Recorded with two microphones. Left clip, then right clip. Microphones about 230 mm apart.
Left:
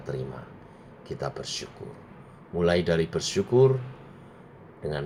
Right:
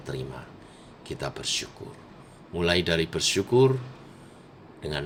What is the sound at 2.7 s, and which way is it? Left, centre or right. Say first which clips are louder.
Speech: even; right.